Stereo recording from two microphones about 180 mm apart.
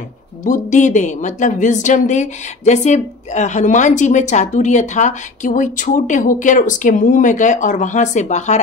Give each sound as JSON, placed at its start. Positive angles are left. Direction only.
{"t": 0.4, "sound": "speech", "side_deg": 45}